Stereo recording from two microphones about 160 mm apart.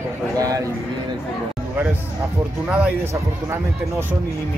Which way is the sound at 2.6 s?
5° right (ahead or behind).